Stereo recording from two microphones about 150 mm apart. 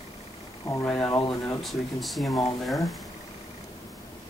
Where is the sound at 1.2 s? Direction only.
20° left (ahead or behind).